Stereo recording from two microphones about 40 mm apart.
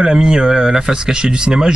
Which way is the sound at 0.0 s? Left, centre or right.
Centre.